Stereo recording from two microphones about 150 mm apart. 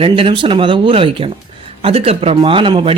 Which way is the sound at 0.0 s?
35° right (ahead or behind).